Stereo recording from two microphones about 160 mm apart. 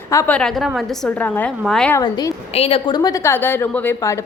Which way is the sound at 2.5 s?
40° left (ahead or behind).